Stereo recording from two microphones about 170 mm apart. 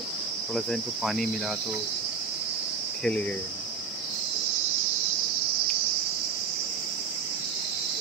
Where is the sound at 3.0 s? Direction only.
5° left (ahead or behind).